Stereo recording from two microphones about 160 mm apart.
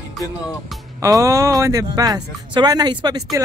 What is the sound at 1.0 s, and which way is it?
Speech, 20° right (ahead or behind).